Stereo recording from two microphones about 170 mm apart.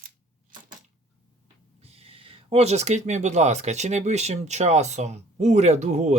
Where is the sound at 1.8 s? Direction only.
35° right (ahead or behind).